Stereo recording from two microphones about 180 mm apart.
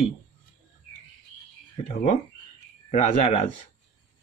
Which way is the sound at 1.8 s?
40° left (ahead or behind).